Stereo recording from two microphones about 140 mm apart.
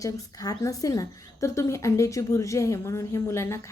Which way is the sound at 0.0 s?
25° left (ahead or behind).